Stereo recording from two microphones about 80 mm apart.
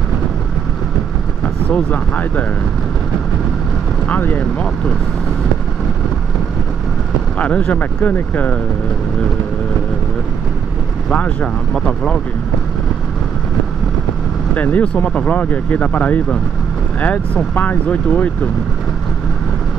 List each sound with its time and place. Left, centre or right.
1.7 s speech: centre
4.1 s speech: left
7.3 s speech: centre
11.1 s speech: centre
14.5 s speech: centre